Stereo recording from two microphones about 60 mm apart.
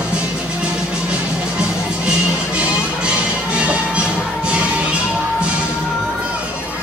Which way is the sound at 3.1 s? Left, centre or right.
Centre.